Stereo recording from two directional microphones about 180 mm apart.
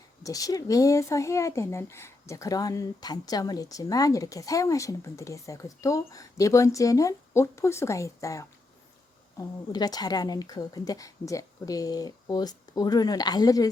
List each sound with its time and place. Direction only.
0.2 s speech: 20° left (ahead or behind)